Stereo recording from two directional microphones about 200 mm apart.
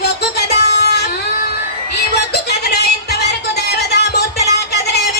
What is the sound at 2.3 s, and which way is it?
Music, 55° left (ahead or behind).